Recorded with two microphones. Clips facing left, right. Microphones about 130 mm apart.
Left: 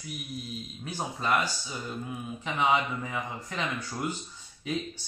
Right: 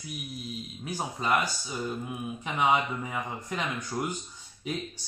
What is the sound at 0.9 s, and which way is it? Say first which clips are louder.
Speech: right 1 dB; 15° right (ahead or behind).